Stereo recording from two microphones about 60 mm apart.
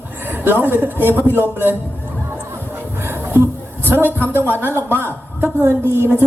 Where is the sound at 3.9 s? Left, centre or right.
Right.